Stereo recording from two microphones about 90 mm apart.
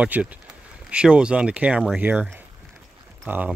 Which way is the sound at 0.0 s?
15° right (ahead or behind).